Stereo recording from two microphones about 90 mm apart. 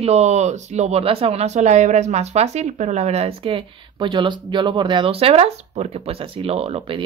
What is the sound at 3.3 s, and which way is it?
Speech, 90° right.